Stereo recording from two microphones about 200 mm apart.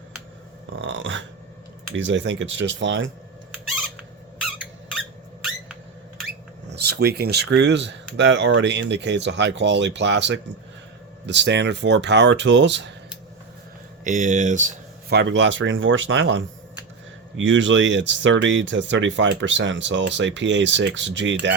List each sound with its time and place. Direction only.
0.7 s a sound: 70° right (ahead or behind)
2.0 s speech: 70° right (ahead or behind)
6.7 s speech: 55° right (ahead or behind)
14.0 s speech: 40° right (ahead or behind)
15.1 s speech: 60° right (ahead or behind)